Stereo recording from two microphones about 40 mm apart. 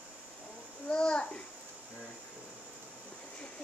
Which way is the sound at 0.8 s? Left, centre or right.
Left.